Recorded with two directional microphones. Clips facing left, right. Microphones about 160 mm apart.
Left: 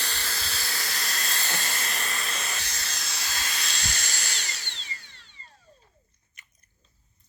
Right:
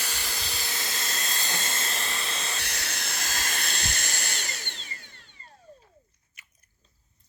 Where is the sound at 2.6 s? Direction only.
65° right (ahead or behind).